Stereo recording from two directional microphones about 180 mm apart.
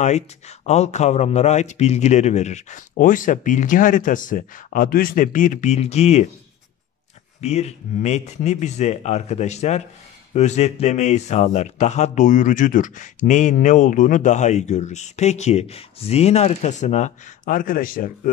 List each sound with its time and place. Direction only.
0.0 s speech: 40° left (ahead or behind)
7.4 s speech: 40° left (ahead or behind)